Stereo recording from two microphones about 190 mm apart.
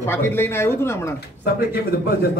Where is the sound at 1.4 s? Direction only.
55° left (ahead or behind).